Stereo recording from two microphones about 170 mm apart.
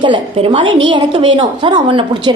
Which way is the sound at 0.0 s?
30° right (ahead or behind).